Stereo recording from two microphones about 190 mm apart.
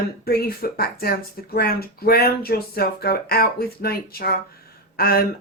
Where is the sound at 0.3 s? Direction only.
50° left (ahead or behind).